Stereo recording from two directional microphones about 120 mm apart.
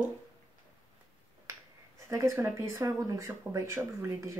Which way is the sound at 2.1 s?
25° right (ahead or behind).